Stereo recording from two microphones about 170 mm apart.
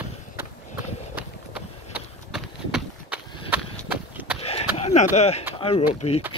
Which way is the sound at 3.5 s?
10° right (ahead or behind).